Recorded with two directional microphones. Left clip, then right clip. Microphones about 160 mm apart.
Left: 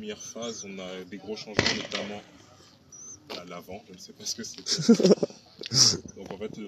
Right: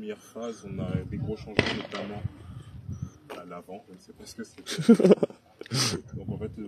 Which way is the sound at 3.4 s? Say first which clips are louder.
Right 1 dB; 25° left (ahead or behind).